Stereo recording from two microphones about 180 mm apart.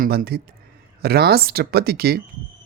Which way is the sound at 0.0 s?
55° right (ahead or behind).